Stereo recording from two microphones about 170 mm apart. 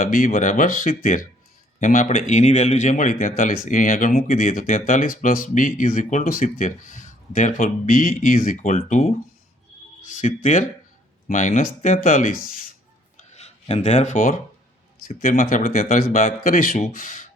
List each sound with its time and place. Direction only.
0.0 s speech: 50° left (ahead or behind)
13.1 s rub: 40° left (ahead or behind)
14.9 s speech: 50° left (ahead or behind)